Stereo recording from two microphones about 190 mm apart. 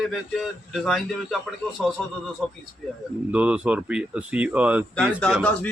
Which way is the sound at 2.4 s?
Centre (ahead or behind).